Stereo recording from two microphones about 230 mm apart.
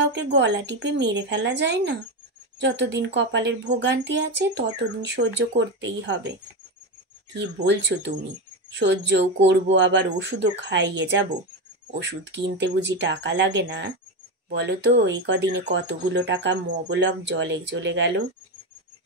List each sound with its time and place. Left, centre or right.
0.0 s speech: right
7.3 s speech: right